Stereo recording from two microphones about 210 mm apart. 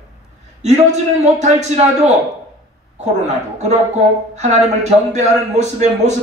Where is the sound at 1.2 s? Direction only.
35° right (ahead or behind).